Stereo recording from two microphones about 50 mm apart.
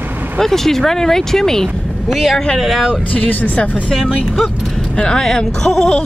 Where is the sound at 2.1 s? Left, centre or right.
Centre.